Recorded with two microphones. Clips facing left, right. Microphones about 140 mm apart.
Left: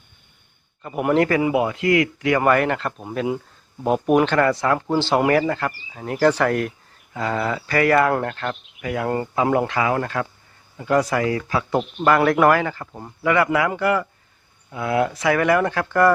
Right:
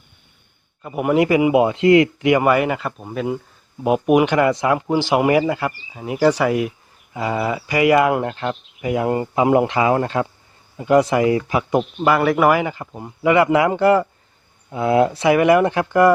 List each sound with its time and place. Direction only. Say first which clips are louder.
0.8 s speech: right 1 dB; 5° right (ahead or behind); by 2.4 s 20° right (ahead or behind)
2.4 s speech: right 1 dB; 5° right (ahead or behind)
3.8 s speech: right 2 dB; 10° right (ahead or behind)
11.8 s speech: left 2 dB; 5° right (ahead or behind)